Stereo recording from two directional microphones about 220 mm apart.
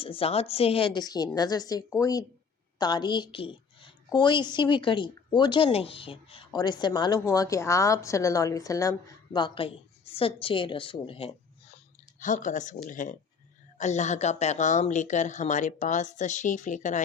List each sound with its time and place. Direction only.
0.0 s a woman's voice: 25° left (ahead or behind)